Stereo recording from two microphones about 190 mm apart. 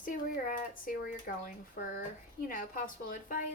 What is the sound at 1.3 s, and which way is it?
A woman's voice, 50° left (ahead or behind).